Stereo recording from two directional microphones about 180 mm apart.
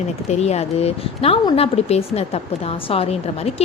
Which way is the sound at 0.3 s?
35° left (ahead or behind).